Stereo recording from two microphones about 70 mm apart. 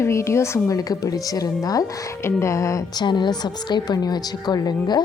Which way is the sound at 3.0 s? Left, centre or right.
Left.